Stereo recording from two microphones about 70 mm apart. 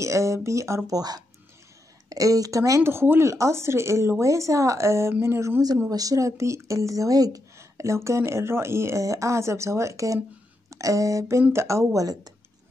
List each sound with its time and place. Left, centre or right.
0.0 s speech: right
0.9 s speech: right
2.0 s a woman's voice: right
2.8 s speech: right
5.9 s speech: right
7.5 s speech: right